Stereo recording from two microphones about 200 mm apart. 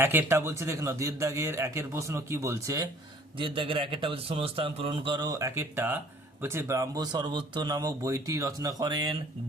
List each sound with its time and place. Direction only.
0.0 s a man's voice: 10° right (ahead or behind)